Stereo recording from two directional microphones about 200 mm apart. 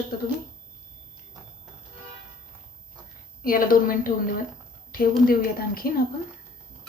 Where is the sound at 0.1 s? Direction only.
50° left (ahead or behind).